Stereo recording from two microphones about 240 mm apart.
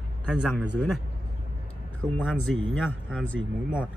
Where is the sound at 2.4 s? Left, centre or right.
Right.